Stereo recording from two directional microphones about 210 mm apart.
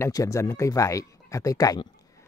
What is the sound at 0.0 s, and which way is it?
Speech, 15° left (ahead or behind).